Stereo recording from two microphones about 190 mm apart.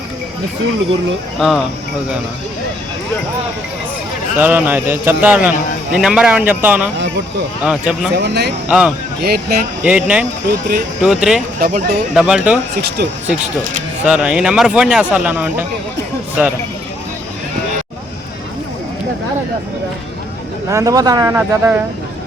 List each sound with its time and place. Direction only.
1.4 s speech: centre (ahead or behind)
4.4 s a man's voice: 10° right (ahead or behind)
8.1 s speech: 60° right (ahead or behind)
8.6 s speech: 5° right (ahead or behind)
9.2 s speech: 55° right (ahead or behind)
9.8 s a man's voice: 5° right (ahead or behind)
11.6 s speech: 50° right (ahead or behind)
12.1 s speech: 5° right (ahead or behind)
12.7 s speech: 55° right (ahead or behind)
14.0 s speech: 5° right (ahead or behind)
20.7 s a man's voice: 15° right (ahead or behind)